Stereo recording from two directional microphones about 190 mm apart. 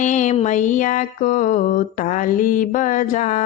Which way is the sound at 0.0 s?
40° left (ahead or behind).